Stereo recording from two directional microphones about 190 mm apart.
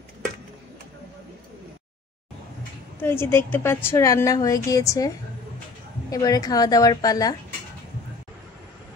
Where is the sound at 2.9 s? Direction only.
10° left (ahead or behind).